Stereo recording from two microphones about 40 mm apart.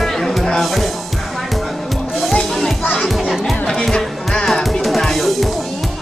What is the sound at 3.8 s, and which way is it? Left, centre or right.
Music, centre.